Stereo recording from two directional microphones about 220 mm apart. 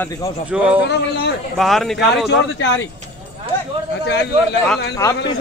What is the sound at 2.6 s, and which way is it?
Speech, 55° left (ahead or behind).